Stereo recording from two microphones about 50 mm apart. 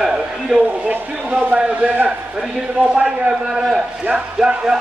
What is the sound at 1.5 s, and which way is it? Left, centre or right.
A man's voice, right.